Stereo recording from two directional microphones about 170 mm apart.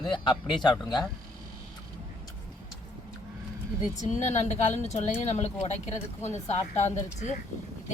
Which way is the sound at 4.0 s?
45° left (ahead or behind).